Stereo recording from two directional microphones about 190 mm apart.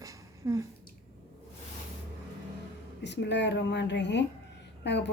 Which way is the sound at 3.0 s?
65° left (ahead or behind).